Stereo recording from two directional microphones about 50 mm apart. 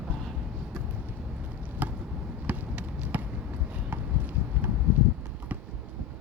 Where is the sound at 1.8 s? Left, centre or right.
Right.